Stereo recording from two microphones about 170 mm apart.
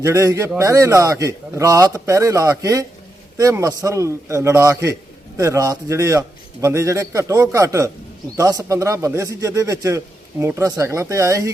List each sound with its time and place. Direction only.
0.0 s a man's voice: 15° right (ahead or behind)